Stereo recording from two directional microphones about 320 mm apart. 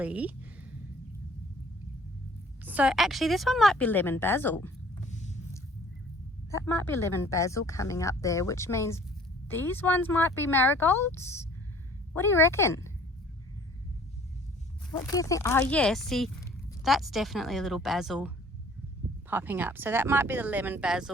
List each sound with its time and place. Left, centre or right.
0.0 s a woman's voice: centre
2.6 s a woman's voice: centre
6.5 s speech: centre
15.0 s a woman's voice: centre
19.3 s a woman's voice: centre